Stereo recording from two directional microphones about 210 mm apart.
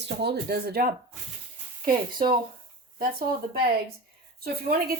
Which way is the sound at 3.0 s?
45° right (ahead or behind).